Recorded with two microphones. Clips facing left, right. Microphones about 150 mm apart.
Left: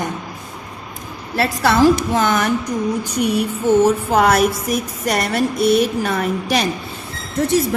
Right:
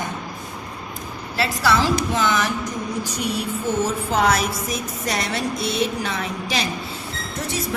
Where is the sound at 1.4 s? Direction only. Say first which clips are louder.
Left 5 dB; 55° left (ahead or behind).